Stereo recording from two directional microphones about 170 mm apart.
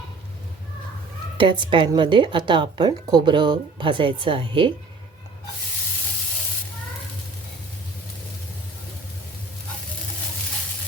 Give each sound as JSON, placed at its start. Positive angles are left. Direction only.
{"t": 1.4, "sound": "speech", "side_deg": -30}